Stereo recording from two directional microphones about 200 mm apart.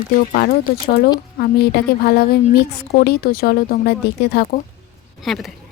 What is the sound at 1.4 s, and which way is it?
A woman's voice, 50° left (ahead or behind).